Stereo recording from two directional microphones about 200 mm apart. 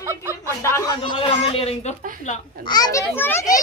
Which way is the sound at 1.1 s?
30° left (ahead or behind).